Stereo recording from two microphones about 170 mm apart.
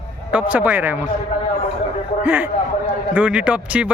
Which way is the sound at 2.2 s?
10° right (ahead or behind).